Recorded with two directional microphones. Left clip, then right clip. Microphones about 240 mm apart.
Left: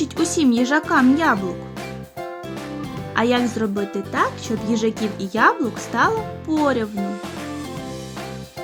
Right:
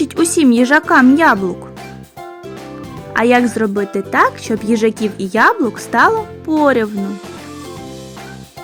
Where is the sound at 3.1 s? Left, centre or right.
Right.